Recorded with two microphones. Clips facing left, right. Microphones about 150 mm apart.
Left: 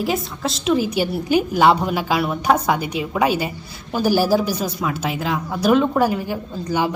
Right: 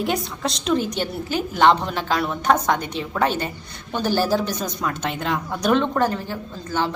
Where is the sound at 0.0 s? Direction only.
Centre (ahead or behind).